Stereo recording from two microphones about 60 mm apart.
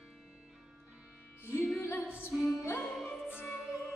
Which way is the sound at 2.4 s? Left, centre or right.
Centre.